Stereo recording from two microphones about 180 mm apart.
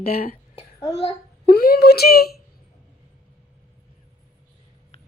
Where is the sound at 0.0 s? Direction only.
55° left (ahead or behind).